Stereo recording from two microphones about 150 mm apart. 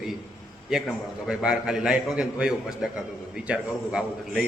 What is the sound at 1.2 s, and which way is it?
A man's voice, 5° right (ahead or behind).